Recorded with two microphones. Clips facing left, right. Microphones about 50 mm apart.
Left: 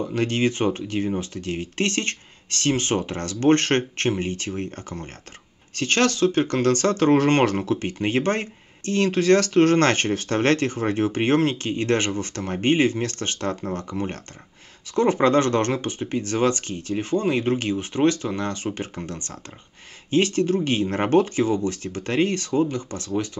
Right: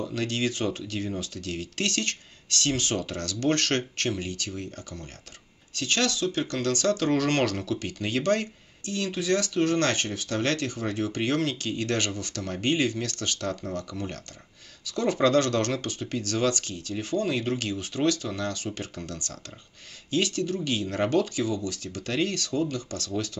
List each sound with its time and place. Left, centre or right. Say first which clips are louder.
0.0 s speech: left 6 dB; left
8.9 s speech: left 8 dB; left